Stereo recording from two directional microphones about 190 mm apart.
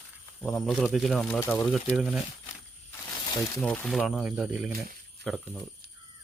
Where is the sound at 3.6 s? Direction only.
5° left (ahead or behind).